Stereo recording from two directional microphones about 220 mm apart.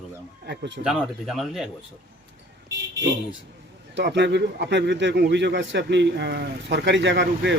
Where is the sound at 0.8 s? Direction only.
5° right (ahead or behind).